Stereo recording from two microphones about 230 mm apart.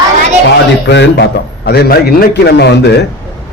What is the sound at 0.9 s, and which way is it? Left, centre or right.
A man's voice, left.